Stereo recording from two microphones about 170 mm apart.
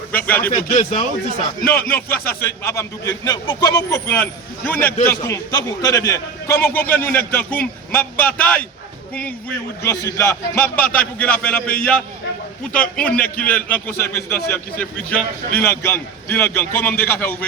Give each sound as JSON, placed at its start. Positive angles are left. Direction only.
{"t": 0.3, "sound": "a man's voice", "side_deg": 10}
{"t": 0.7, "sound": "speech", "side_deg": 40}
{"t": 1.9, "sound": "a man's voice", "side_deg": 10}
{"t": 9.8, "sound": "a man's voice", "side_deg": 20}